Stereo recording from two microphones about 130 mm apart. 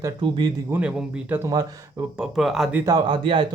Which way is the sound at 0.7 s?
10° right (ahead or behind).